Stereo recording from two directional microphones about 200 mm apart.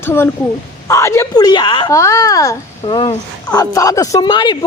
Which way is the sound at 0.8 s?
15° left (ahead or behind).